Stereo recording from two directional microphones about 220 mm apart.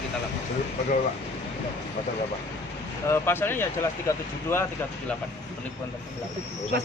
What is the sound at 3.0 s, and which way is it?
Speech, 10° left (ahead or behind).